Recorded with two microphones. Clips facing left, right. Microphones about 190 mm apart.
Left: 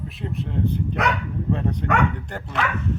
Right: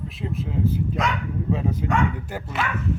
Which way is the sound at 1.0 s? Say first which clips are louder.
Left 3 dB; 65° left (ahead or behind).